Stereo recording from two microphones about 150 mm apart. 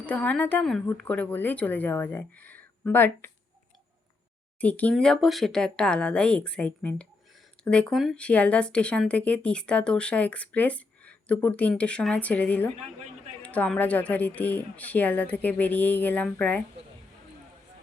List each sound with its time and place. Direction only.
0.0 s speech: 10° left (ahead or behind)
4.6 s speech: 10° left (ahead or behind)
12.7 s a woman's voice: 45° right (ahead or behind)
13.4 s speech: 10° left (ahead or behind)